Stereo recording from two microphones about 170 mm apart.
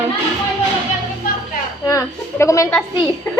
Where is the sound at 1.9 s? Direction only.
15° left (ahead or behind).